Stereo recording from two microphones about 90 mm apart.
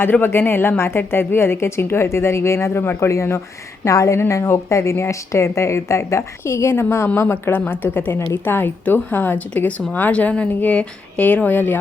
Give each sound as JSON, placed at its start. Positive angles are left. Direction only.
{"t": 0.0, "sound": "a woman's voice", "side_deg": 25}